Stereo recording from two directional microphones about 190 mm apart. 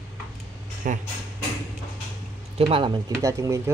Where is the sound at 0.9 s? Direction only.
45° right (ahead or behind).